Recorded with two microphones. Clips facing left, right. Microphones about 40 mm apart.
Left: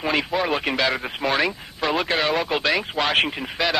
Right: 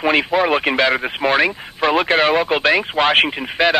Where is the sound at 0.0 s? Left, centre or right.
Right.